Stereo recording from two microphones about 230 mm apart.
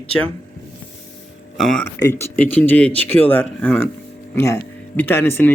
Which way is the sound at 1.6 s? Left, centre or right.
Centre.